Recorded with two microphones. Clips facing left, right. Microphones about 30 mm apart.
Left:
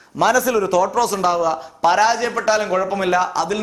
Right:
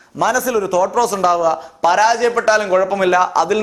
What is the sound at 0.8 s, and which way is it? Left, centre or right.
Speech, centre.